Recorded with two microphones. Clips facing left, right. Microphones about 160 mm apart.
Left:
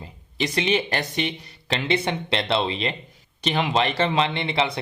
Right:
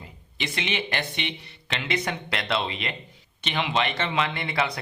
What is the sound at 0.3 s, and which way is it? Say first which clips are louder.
Speech: left 7 dB; 35° left (ahead or behind).